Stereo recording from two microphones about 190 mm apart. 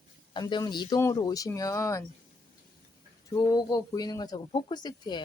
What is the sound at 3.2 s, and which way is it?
A woman's voice, 20° left (ahead or behind).